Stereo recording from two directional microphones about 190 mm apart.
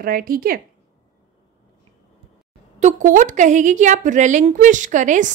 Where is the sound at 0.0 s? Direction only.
50° right (ahead or behind).